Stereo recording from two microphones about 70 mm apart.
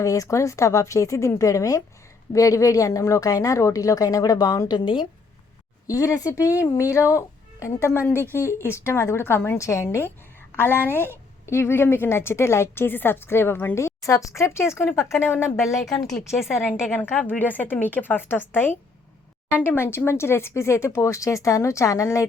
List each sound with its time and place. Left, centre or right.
0.0 s speech: left
5.9 s a woman's voice: left
9.6 s speech: left
10.6 s a woman's voice: left
13.7 s a woman's voice: left
16.3 s a woman's voice: centre
16.9 s a woman's voice: left